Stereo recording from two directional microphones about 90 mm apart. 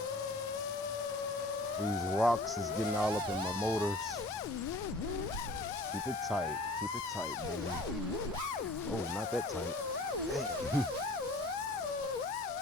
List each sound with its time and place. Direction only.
2.1 s music: centre (ahead or behind)
3.6 s speech: 30° left (ahead or behind)